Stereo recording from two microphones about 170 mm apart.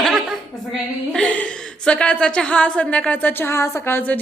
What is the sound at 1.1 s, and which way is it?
A woman's voice, 5° left (ahead or behind).